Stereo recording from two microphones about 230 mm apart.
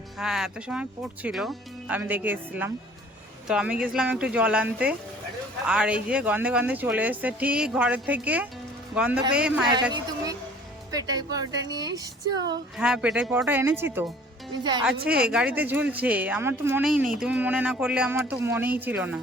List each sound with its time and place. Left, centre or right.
0.2 s speech: centre
10.9 s speech: centre
12.7 s a woman's voice: centre
15.2 s speech: centre